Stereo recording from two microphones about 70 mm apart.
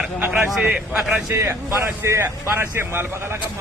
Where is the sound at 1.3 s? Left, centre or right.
Right.